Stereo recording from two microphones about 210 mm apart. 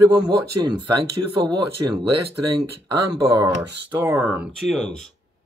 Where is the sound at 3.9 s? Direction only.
10° right (ahead or behind).